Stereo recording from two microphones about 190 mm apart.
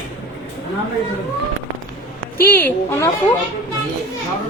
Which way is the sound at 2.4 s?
10° left (ahead or behind).